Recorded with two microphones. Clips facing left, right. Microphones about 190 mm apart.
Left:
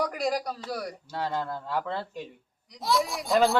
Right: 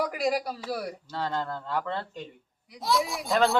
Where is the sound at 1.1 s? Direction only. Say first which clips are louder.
Left 1 dB; 10° left (ahead or behind).